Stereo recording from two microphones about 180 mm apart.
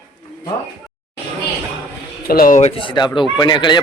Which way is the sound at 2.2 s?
55° left (ahead or behind).